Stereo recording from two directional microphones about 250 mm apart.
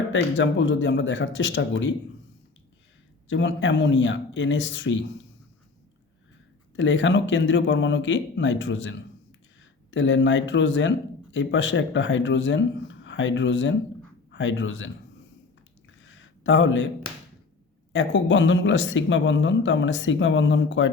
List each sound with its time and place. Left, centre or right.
0.1 s speech: left
3.2 s speech: left
6.7 s speech: left
16.0 s a sound: left
17.9 s speech: left